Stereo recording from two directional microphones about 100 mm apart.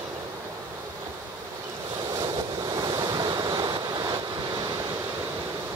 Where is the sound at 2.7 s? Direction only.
40° right (ahead or behind).